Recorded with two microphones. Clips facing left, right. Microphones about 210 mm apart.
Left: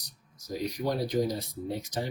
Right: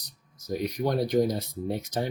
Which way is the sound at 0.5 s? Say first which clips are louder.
Right 3 dB; 55° right (ahead or behind).